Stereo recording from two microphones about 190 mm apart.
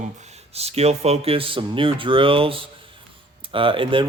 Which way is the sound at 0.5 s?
35° right (ahead or behind).